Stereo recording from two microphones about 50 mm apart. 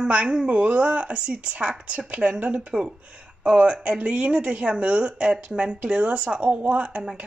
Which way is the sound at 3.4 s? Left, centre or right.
Right.